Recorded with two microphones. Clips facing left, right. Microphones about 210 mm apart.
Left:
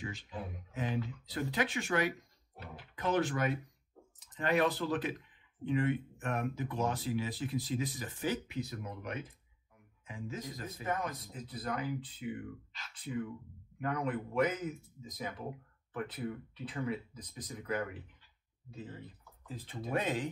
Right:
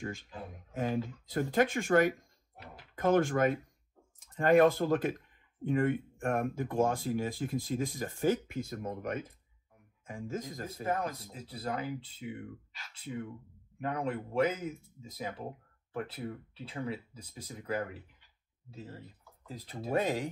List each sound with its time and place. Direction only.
0.7 s speech: 45° right (ahead or behind)
10.9 s a man's voice: 30° right (ahead or behind)